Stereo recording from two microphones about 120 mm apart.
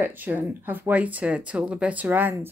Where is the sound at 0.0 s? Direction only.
15° right (ahead or behind).